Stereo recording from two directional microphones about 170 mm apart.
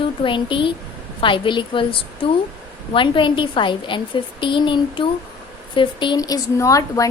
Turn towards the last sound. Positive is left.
turn(degrees=20)  # may be behind; listen again after turning